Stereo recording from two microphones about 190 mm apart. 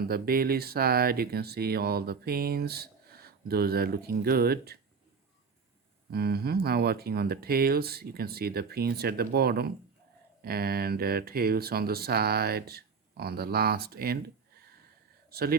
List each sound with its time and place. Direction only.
0.0 s speech: 55° right (ahead or behind)
6.1 s speech: 55° right (ahead or behind)